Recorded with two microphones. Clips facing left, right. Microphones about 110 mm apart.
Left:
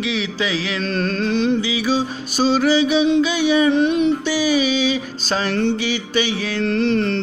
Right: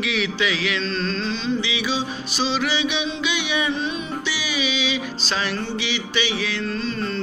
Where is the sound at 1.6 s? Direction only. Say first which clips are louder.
Left 5 dB; 40° left (ahead or behind).